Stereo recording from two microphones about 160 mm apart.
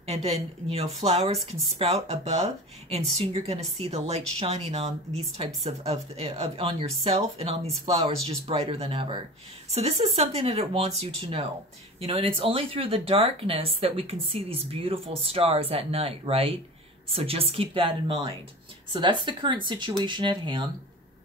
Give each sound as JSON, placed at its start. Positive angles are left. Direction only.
{"t": 0.0, "sound": "speech", "side_deg": -40}